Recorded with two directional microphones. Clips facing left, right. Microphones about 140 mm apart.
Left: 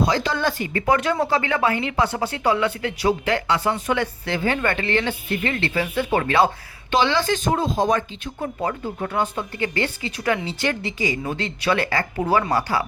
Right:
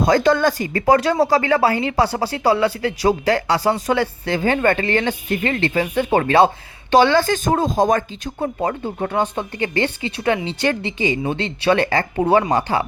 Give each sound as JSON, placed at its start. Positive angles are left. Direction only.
{"t": 0.0, "sound": "speech", "side_deg": -50}
{"t": 6.9, "sound": "speech", "side_deg": -45}